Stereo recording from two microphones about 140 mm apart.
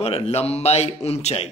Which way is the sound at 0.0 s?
45° left (ahead or behind).